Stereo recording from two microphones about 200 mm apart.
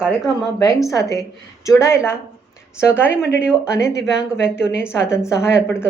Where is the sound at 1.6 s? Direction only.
15° left (ahead or behind).